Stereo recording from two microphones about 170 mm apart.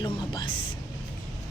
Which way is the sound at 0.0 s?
25° left (ahead or behind).